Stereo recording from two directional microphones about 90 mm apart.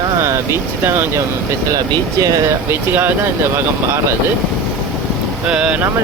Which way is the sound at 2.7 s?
20° right (ahead or behind).